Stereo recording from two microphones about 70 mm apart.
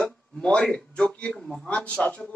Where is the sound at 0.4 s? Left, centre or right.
Centre.